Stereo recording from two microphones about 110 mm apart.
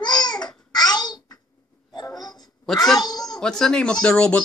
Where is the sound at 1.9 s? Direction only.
35° left (ahead or behind).